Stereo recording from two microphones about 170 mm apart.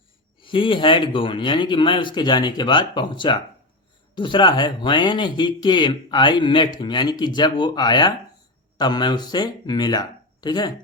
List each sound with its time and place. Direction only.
0.3 s speech: 30° left (ahead or behind)